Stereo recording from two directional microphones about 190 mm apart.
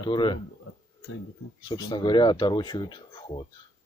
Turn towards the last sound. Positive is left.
turn(degrees=25)  # may be behind; listen again after turning